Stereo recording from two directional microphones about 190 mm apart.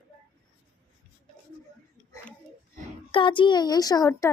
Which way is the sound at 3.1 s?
25° left (ahead or behind).